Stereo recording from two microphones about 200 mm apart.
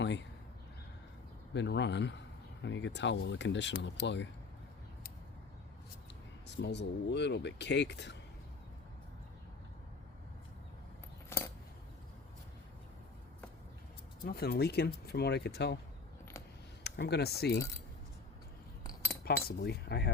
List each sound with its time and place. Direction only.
0.0 s speech: 60° left (ahead or behind)
1.5 s speech: 60° left (ahead or behind)
6.5 s speech: 60° left (ahead or behind)
11.3 s scissors: 15° left (ahead or behind)
14.3 s speech: 50° left (ahead or behind)
16.8 s speech: 55° left (ahead or behind)
19.2 s speech: 50° left (ahead or behind)